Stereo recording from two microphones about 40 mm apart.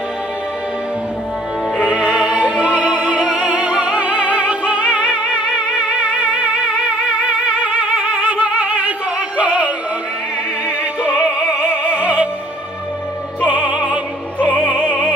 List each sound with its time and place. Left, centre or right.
1.8 s music: right
9.4 s synthetic singing: right
10.8 s music: right
13.4 s music: right